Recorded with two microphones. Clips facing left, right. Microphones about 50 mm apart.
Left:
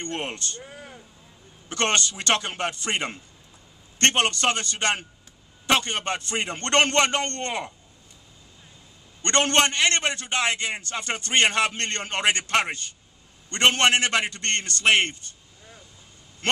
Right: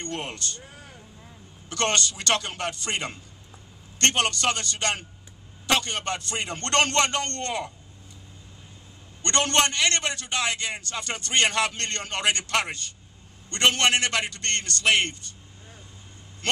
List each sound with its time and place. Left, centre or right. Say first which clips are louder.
0.0 s a man's voice: left 2 dB; left
9.2 s a man's voice: left 2 dB; left